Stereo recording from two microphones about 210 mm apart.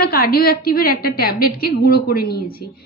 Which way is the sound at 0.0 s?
45° left (ahead or behind).